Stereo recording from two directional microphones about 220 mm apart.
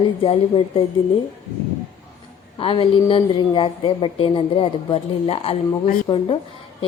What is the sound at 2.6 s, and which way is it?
A woman's voice, 25° left (ahead or behind).